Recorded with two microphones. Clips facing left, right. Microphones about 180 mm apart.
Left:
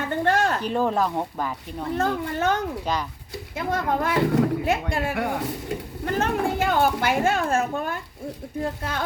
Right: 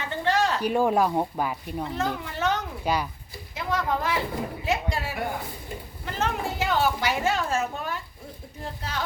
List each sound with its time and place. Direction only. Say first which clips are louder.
0.0 s a sound: left 3 dB; 50° left (ahead or behind)
0.6 s speech: right 1 dB; 10° right (ahead or behind)
2.0 s speech: left 6 dB; 50° left (ahead or behind)
2.8 s speech: right 1 dB; 10° right (ahead or behind)
3.5 s speech: left 2 dB; 50° left (ahead or behind); by 5.7 s 75° left (ahead or behind)
6.1 s speech: left 5 dB; 50° left (ahead or behind)